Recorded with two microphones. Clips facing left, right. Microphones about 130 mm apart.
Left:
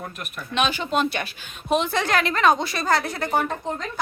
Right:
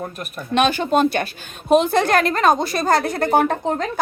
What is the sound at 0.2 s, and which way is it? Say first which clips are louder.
A woman's voice: right 6 dB; 45° right (ahead or behind).